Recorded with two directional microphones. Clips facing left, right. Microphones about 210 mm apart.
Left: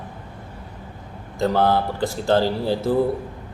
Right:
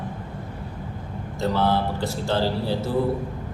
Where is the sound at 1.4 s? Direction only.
50° left (ahead or behind).